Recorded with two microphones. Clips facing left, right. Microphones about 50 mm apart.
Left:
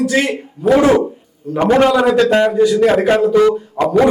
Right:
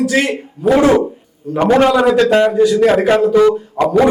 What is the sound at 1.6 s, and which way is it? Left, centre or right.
Speech, left.